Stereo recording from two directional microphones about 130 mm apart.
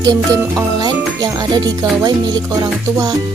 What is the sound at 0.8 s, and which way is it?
Speech, 35° right (ahead or behind).